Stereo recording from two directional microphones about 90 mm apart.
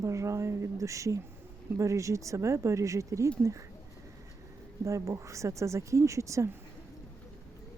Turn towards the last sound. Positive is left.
turn(degrees=-35)  # may be behind; listen again after turning